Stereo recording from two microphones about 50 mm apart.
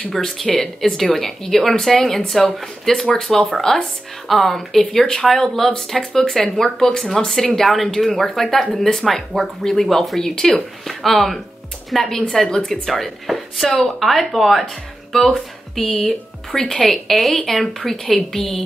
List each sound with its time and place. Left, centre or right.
0.1 s speech: centre